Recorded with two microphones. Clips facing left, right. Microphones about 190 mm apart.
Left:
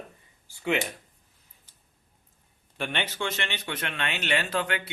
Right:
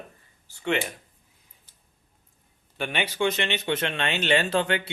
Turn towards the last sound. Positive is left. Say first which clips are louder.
# right 5 dB
turn(degrees=-25)  # may be behind; listen again after turning